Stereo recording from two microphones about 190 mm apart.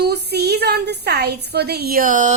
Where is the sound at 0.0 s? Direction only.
60° right (ahead or behind).